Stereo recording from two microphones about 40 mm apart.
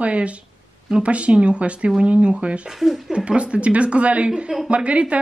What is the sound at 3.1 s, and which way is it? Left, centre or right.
A woman's voice, right.